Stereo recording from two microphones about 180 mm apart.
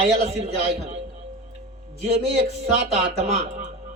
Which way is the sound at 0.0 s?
35° right (ahead or behind).